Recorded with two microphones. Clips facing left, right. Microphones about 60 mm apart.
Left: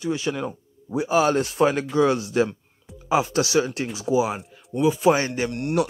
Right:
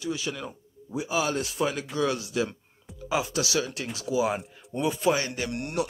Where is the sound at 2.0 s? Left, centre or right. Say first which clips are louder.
Left 7 dB; left.